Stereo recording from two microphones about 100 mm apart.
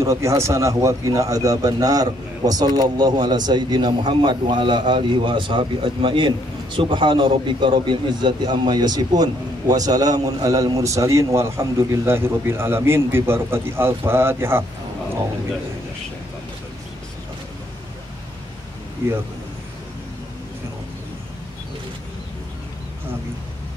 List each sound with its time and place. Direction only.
0.0 s a man's voice: 30° right (ahead or behind)